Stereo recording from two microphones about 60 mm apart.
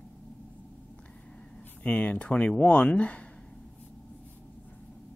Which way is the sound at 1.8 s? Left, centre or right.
Left.